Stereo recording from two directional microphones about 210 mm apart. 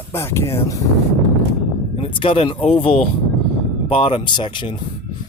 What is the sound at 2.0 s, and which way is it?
Speech, 25° left (ahead or behind).